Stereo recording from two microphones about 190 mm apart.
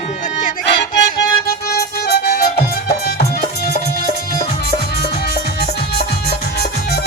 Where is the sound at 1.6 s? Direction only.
55° left (ahead or behind).